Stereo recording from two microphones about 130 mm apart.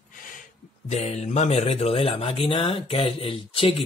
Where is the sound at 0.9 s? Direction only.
60° left (ahead or behind).